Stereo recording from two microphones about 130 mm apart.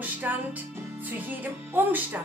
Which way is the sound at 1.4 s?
15° right (ahead or behind).